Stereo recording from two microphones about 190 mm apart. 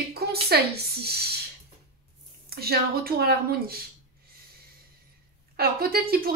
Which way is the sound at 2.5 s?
55° right (ahead or behind).